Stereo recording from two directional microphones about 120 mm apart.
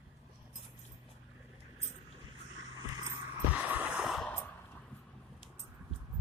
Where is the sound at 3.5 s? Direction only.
15° right (ahead or behind).